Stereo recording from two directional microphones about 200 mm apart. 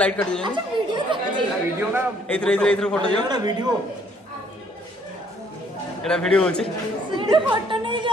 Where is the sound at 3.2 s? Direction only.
20° right (ahead or behind).